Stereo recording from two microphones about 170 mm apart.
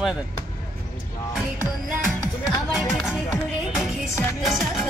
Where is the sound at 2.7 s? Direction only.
Centre (ahead or behind).